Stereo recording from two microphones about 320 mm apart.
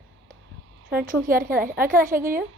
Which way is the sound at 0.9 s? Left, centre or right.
Right.